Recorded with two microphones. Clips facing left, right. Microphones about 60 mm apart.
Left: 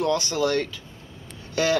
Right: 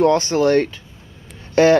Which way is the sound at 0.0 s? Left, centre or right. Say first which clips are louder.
Right 8 dB; right.